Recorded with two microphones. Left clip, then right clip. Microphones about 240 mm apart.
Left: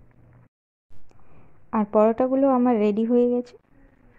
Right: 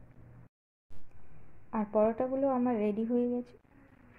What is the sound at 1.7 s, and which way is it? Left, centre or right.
Speech, left.